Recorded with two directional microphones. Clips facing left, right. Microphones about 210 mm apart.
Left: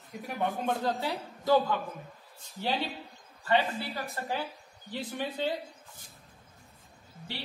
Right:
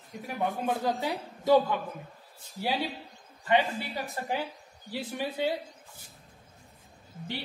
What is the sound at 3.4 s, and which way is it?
A woman's voice, 15° right (ahead or behind).